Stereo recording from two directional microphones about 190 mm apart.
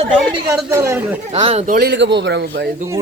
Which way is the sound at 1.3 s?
35° right (ahead or behind).